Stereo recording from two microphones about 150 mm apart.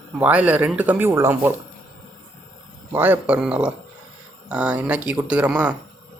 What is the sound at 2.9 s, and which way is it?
A man's voice, 10° right (ahead or behind).